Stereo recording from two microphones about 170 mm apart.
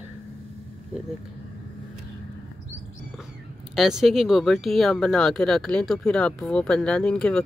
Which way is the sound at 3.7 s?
Centre (ahead or behind).